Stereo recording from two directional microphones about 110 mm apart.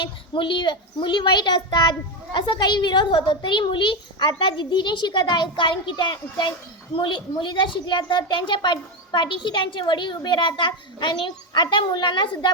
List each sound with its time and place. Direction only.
0.0 s a child's voice: 50° left (ahead or behind)